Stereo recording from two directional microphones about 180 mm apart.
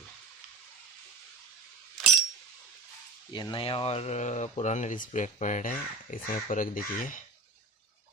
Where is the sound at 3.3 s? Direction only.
25° left (ahead or behind); by 7.2 s 50° left (ahead or behind).